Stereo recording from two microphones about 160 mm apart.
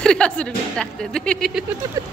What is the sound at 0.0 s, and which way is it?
Speech, 5° left (ahead or behind).